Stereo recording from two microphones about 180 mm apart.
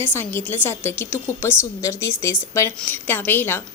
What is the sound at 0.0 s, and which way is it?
A woman's voice, 10° left (ahead or behind).